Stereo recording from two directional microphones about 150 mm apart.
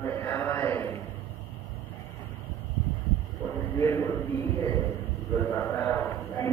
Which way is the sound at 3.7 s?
15° left (ahead or behind).